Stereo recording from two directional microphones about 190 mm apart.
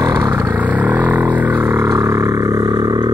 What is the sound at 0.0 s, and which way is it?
Vehicle, 15° right (ahead or behind).